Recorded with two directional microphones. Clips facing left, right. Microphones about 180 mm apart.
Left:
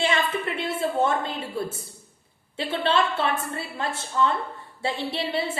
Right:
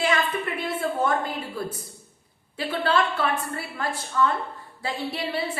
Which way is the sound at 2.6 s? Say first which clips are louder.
Even; 25° left (ahead or behind).